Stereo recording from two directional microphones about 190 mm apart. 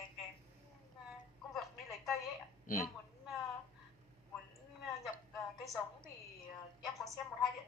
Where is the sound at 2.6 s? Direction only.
45° left (ahead or behind).